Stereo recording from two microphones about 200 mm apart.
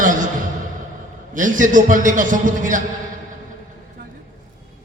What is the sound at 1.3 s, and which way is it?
A man's voice, 40° right (ahead or behind).